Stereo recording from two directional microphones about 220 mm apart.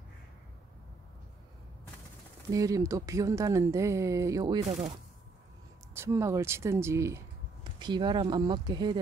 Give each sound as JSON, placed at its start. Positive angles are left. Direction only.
{"t": 2.5, "sound": "speech", "side_deg": -15}
{"t": 5.9, "sound": "speech", "side_deg": -15}